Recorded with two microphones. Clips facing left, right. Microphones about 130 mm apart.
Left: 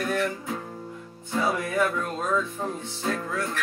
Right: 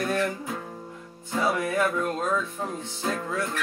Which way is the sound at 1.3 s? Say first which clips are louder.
Right 1 dB; 10° right (ahead or behind).